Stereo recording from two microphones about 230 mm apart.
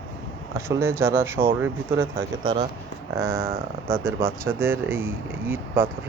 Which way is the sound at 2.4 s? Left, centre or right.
Right.